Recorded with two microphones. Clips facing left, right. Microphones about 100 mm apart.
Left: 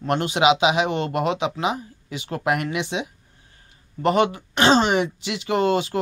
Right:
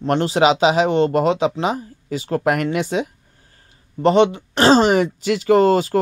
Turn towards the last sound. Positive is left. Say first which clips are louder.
# right 7 dB
turn(degrees=-40)  # may be behind; listen again after turning